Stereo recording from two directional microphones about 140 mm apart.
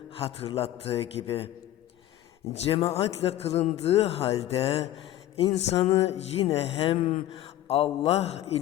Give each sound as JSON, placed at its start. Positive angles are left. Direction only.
{"t": 0.1, "sound": "a man's voice", "side_deg": 45}
{"t": 2.5, "sound": "a man's voice", "side_deg": 45}